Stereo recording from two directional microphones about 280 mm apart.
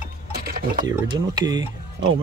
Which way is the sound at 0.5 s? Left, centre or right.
Right.